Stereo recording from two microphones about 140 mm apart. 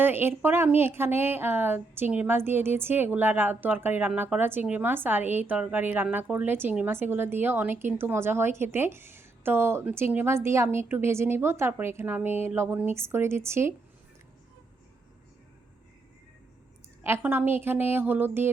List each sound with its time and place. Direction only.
0.0 s a woman's voice: 15° right (ahead or behind)
17.0 s a woman's voice: 15° right (ahead or behind)